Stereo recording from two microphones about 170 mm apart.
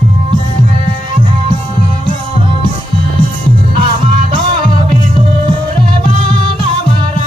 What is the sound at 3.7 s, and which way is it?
Music, 30° right (ahead or behind).